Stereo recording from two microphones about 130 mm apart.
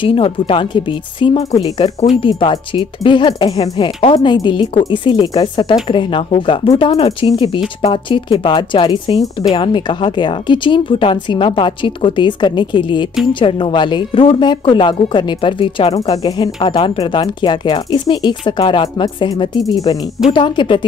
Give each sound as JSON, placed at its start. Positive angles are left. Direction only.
{"t": 0.0, "sound": "a woman's voice", "side_deg": 45}
{"t": 16.1, "sound": "a woman's voice", "side_deg": 30}